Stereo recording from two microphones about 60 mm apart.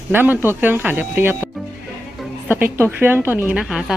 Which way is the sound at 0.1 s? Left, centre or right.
Right.